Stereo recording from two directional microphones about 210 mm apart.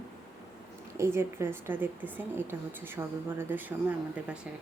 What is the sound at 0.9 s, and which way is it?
A woman's voice, 10° right (ahead or behind).